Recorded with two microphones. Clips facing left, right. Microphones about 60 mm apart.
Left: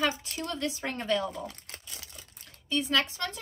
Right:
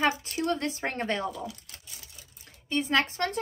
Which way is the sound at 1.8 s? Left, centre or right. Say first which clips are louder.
Left 3 dB; left.